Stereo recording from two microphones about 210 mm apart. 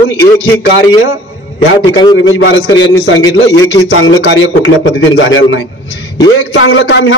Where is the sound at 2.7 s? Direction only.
60° left (ahead or behind).